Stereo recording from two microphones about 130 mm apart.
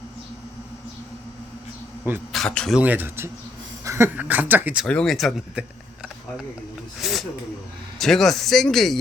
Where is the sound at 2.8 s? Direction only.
15° right (ahead or behind).